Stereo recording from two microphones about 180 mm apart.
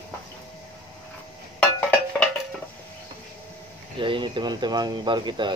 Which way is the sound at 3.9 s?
30° right (ahead or behind).